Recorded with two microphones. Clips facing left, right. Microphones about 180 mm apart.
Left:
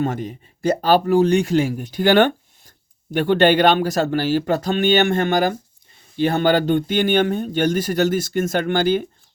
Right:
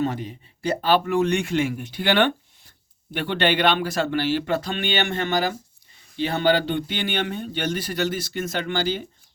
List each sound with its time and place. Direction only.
0.0 s speech: 50° left (ahead or behind)